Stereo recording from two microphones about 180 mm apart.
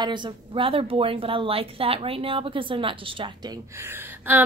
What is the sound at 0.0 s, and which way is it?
A woman's voice, 25° right (ahead or behind).